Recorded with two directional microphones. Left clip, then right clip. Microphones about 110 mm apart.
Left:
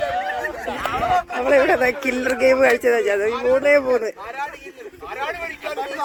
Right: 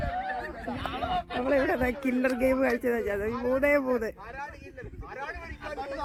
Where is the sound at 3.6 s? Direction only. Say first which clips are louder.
Left 8 dB; 10° right (ahead or behind).